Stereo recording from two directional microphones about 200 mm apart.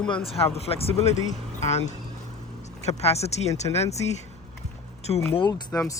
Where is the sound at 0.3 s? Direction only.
30° left (ahead or behind).